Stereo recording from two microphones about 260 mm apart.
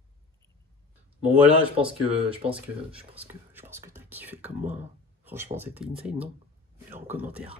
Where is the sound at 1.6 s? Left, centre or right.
Right.